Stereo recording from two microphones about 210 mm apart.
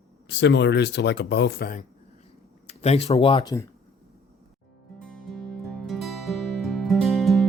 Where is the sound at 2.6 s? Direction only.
30° left (ahead or behind).